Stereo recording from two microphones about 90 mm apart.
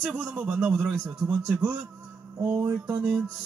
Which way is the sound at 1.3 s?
10° right (ahead or behind).